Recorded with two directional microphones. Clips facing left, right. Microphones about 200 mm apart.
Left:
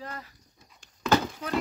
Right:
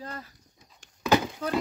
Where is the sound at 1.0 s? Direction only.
15° right (ahead or behind).